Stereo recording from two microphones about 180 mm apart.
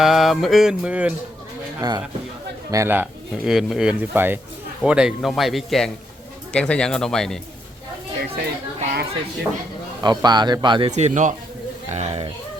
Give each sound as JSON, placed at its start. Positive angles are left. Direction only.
{"t": 0.0, "sound": "speech", "side_deg": 0}
{"t": 1.8, "sound": "speech", "side_deg": -20}
{"t": 2.7, "sound": "speech", "side_deg": -10}
{"t": 8.8, "sound": "a sound", "side_deg": -50}
{"t": 10.0, "sound": "speech", "side_deg": -25}